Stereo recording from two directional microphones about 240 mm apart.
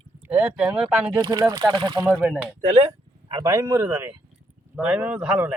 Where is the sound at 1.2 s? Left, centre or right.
Centre.